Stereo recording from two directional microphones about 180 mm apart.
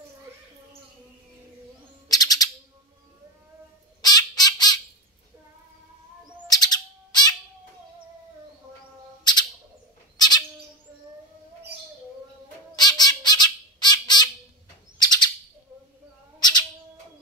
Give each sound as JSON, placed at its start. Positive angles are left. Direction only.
{"t": 2.0, "sound": "owl", "side_deg": 20}
{"t": 4.0, "sound": "bird", "side_deg": 20}
{"t": 6.4, "sound": "bird", "side_deg": 20}
{"t": 9.2, "sound": "bird", "side_deg": 25}
{"t": 12.7, "sound": "squawk", "side_deg": 20}
{"t": 15.0, "sound": "bird", "side_deg": 20}
{"t": 16.3, "sound": "bird", "side_deg": 25}